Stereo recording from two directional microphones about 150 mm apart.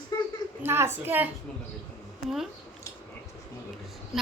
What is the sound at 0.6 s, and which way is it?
Speech, 15° right (ahead or behind).